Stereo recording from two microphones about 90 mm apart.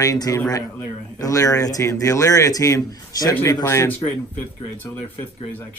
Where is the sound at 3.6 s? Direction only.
30° left (ahead or behind).